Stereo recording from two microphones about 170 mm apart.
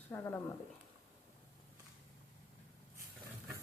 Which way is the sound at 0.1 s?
15° left (ahead or behind).